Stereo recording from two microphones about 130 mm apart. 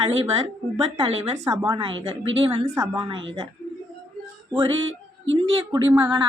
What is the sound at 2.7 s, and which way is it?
Speech, 25° right (ahead or behind).